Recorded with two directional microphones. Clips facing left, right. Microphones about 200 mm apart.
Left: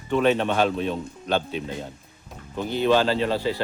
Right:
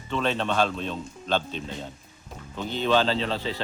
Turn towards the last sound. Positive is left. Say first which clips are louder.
# left 5 dB
turn(degrees=10)  # may be behind; listen again after turning